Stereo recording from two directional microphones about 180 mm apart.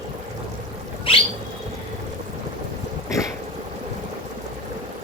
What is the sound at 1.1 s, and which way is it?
Bird, 30° left (ahead or behind).